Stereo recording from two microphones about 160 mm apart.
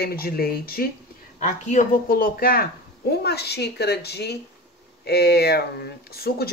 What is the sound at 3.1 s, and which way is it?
A woman's voice, 90° left.